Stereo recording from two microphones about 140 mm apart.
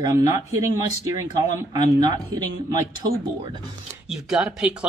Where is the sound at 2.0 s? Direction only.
30° right (ahead or behind).